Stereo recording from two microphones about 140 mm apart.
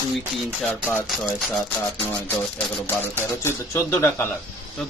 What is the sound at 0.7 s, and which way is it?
Speech, 15° left (ahead or behind).